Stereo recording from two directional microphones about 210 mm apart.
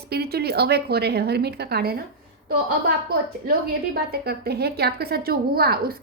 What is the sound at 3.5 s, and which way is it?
A woman's voice, 45° right (ahead or behind).